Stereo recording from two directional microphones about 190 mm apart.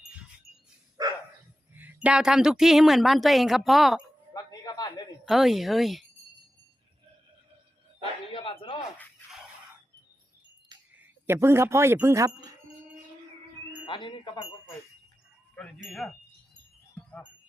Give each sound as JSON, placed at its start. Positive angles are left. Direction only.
{"t": 1.0, "sound": "dog", "side_deg": -20}
{"t": 1.7, "sound": "a woman's voice", "side_deg": -10}
{"t": 4.4, "sound": "a sound", "side_deg": 20}
{"t": 5.2, "sound": "a woman's voice", "side_deg": 0}
{"t": 8.3, "sound": "a sound", "side_deg": 30}
{"t": 10.9, "sound": "speech", "side_deg": -10}
{"t": 13.8, "sound": "speech", "side_deg": 25}
{"t": 15.5, "sound": "a woman's voice", "side_deg": 0}
{"t": 16.9, "sound": "wind chime", "side_deg": 10}